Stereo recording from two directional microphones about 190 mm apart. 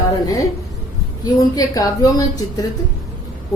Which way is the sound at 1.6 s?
20° left (ahead or behind).